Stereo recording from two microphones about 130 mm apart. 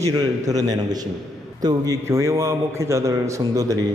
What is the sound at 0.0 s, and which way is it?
A man's voice, 25° right (ahead or behind).